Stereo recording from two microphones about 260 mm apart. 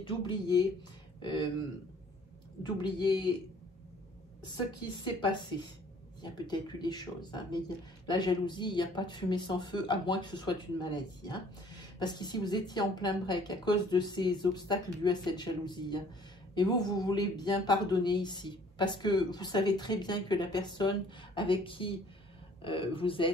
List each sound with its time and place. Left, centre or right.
0.0 s speech: centre
2.6 s speech: centre
5.0 s speech: centre